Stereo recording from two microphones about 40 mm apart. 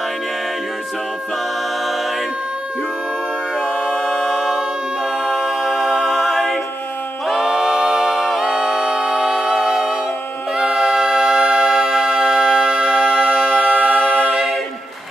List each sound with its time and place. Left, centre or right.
4.0 s music: centre
5.2 s a capella: centre
10.6 s music: centre
13.7 s a capella: right
13.9 s a capella: left
14.3 s a capella: centre